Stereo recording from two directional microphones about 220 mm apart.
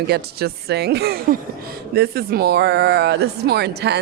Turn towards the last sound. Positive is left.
turn(degrees=-50)  # may be behind; listen again after turning